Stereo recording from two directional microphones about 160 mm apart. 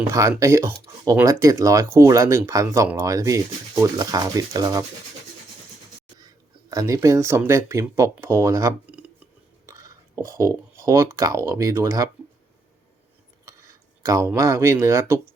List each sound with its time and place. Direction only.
0.1 s speech: 20° right (ahead or behind)
6.7 s speech: 20° right (ahead or behind)
13.5 s speech: 20° right (ahead or behind)